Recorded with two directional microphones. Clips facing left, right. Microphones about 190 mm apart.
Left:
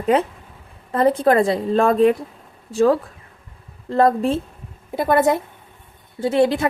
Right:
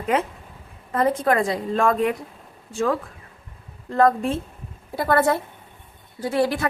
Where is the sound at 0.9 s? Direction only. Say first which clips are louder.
Left 5 dB; 30° left (ahead or behind).